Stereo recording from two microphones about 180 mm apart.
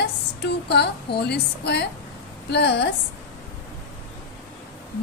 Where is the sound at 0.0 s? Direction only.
70° left (ahead or behind).